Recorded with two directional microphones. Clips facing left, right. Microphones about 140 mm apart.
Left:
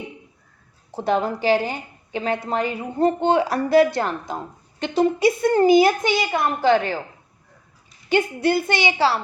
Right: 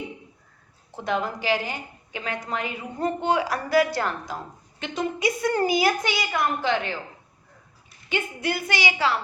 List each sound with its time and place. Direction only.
0.9 s a woman's voice: 35° left (ahead or behind)
8.1 s a woman's voice: 30° left (ahead or behind)